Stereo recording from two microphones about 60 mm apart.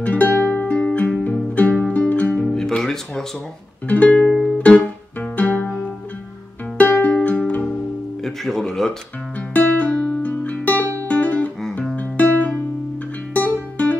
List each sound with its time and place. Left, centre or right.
0.0 s music: left
2.4 s music: centre
3.8 s music: left
6.8 s music: left
8.2 s music: centre
9.5 s music: left
11.1 s guitar: left
13.3 s music: left